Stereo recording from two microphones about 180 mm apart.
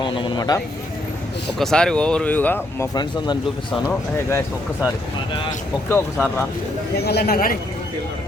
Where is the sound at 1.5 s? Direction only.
5° left (ahead or behind).